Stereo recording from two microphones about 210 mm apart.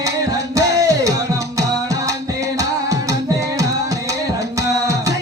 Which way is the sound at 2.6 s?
15° right (ahead or behind).